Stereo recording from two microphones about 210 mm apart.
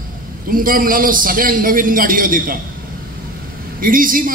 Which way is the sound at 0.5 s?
40° right (ahead or behind).